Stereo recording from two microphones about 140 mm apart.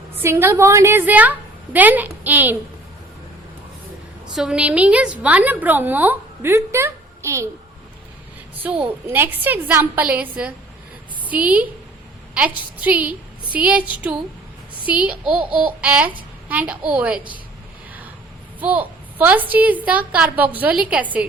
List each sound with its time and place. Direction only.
0.2 s a woman's voice: 15° right (ahead or behind)
4.4 s a woman's voice: 5° right (ahead or behind)
8.7 s a woman's voice: 10° right (ahead or behind)
14.8 s a woman's voice: 10° right (ahead or behind)
18.6 s a woman's voice: 10° right (ahead or behind)